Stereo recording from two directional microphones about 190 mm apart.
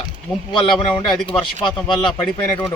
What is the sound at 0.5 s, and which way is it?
A man's voice, 25° left (ahead or behind).